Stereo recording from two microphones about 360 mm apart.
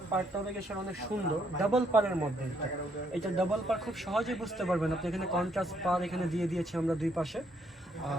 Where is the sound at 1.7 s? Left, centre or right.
Centre.